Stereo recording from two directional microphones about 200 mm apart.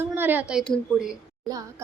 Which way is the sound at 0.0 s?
10° right (ahead or behind).